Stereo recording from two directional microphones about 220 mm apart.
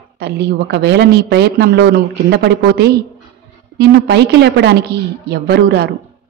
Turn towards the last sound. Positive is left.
turn(degrees=-50)  # may be behind; listen again after turning